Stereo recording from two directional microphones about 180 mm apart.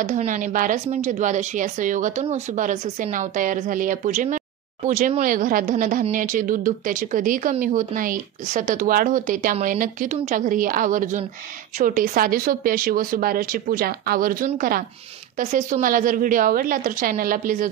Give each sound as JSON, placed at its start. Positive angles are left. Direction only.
{"t": 0.0, "sound": "speech", "side_deg": -40}